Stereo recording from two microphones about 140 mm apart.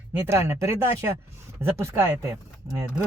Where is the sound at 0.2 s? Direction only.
20° right (ahead or behind).